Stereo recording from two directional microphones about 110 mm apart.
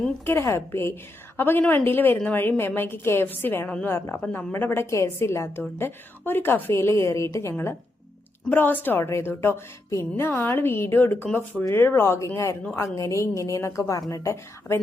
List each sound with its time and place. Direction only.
0.3 s a woman's voice: 25° left (ahead or behind)